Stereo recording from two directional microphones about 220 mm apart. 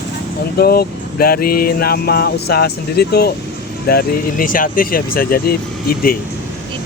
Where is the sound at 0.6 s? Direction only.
45° left (ahead or behind).